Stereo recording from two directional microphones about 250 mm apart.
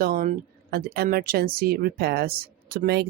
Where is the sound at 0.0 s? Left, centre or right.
Right.